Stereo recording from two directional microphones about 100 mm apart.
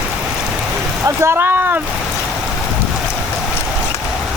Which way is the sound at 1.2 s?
25° right (ahead or behind).